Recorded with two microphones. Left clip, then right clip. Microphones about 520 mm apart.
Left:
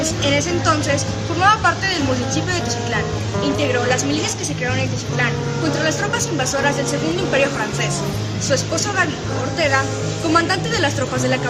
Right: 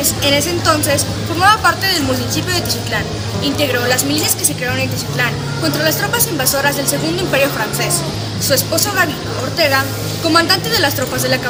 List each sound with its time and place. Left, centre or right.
0.2 s speech: left
5.8 s speech: left
8.4 s speech: left